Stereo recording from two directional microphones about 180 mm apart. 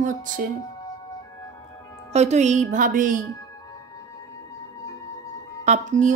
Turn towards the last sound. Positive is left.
turn(degrees=-45)  # may be behind; listen again after turning